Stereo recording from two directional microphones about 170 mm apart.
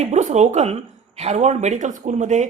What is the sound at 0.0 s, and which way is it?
Speech, 45° right (ahead or behind).